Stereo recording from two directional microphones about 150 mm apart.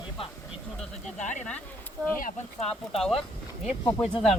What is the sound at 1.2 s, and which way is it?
Speech, 55° left (ahead or behind).